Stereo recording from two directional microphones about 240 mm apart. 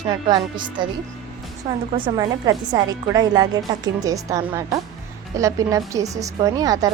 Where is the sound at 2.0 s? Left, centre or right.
Centre.